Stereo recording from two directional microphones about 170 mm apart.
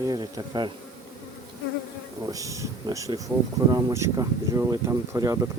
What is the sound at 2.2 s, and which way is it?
Speech, 20° right (ahead or behind).